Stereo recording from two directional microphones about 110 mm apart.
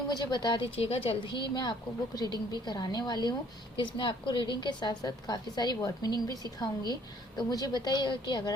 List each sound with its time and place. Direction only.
0.1 s a woman's voice: 40° left (ahead or behind)
0.8 s a woman's voice: 60° left (ahead or behind); by 8.5 s 45° left (ahead or behind)